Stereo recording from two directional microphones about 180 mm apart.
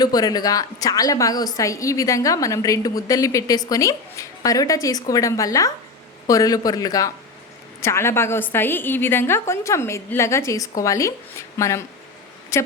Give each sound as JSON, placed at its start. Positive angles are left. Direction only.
{"t": 0.0, "sound": "a woman's voice", "side_deg": 20}